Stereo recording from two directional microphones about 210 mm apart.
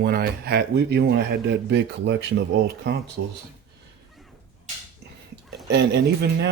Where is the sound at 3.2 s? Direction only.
55° right (ahead or behind).